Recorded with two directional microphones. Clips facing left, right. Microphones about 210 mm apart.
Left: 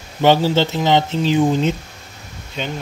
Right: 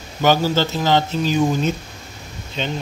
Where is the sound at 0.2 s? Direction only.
25° left (ahead or behind).